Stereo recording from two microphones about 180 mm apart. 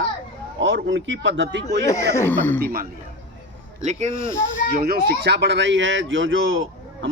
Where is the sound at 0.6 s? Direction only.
90° right.